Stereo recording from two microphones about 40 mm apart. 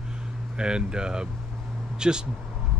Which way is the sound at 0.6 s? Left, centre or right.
Centre.